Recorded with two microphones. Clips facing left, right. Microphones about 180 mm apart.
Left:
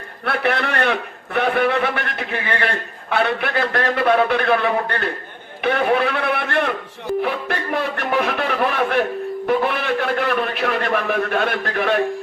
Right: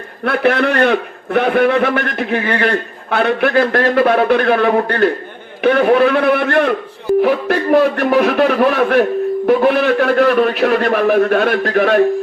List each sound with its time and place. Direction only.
0.3 s a man's voice: 45° right (ahead or behind)